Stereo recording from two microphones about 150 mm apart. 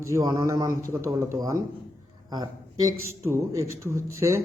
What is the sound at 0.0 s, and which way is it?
Speech, 20° right (ahead or behind).